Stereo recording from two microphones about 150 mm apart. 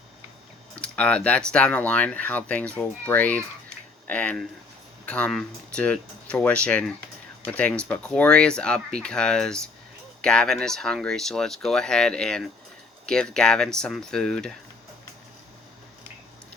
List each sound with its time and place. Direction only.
0.8 s speech: 5° left (ahead or behind)